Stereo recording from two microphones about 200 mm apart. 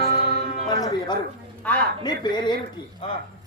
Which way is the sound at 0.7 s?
20° left (ahead or behind).